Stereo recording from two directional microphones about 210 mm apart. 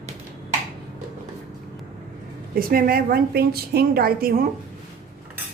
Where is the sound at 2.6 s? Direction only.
45° right (ahead or behind).